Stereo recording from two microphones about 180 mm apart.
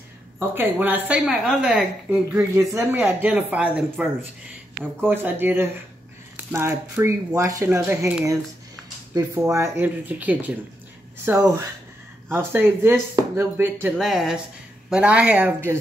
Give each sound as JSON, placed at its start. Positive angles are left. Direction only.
{"t": 0.4, "sound": "a woman's voice", "side_deg": -10}
{"t": 9.1, "sound": "a woman's voice", "side_deg": -15}
{"t": 13.9, "sound": "a woman's voice", "side_deg": 0}